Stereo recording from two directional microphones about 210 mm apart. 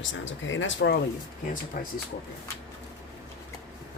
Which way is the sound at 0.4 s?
65° left (ahead or behind).